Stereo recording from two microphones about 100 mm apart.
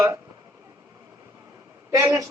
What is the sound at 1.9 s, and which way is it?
Speech, 30° right (ahead or behind).